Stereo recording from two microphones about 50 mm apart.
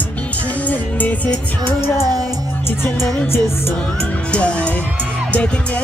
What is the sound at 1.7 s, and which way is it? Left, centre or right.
Music, left.